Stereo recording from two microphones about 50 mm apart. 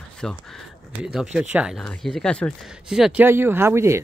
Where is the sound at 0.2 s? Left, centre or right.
Centre.